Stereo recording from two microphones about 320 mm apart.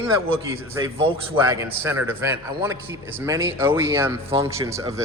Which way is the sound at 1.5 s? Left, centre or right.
Centre.